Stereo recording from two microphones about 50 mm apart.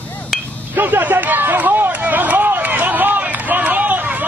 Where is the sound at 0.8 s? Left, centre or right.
Right.